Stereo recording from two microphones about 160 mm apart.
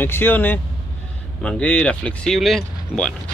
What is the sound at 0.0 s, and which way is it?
Speech, 15° left (ahead or behind).